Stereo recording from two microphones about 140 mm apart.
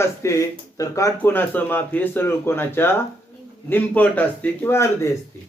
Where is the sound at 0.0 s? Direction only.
20° left (ahead or behind).